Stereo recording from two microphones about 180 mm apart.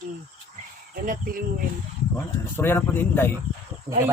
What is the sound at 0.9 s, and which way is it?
Speech, 50° right (ahead or behind).